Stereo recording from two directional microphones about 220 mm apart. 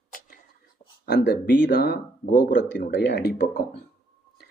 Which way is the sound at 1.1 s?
50° left (ahead or behind).